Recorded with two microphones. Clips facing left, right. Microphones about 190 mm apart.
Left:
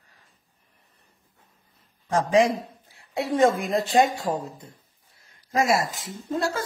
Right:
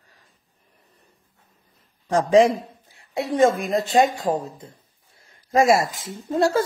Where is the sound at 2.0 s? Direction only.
35° right (ahead or behind).